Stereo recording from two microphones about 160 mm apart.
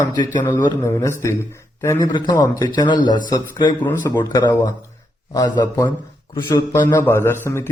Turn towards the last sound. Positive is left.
turn(degrees=15)  # may be behind; listen again after turning